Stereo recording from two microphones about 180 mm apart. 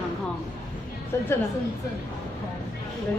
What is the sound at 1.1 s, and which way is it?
Speech, 15° left (ahead or behind).